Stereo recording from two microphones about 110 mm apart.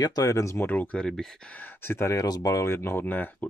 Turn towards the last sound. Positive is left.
turn(degrees=15)  # may be behind; listen again after turning